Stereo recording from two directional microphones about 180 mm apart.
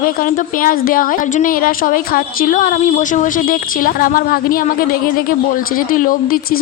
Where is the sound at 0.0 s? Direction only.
50° left (ahead or behind).